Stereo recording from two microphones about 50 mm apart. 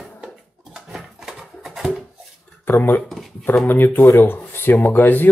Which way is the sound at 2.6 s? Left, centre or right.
Left.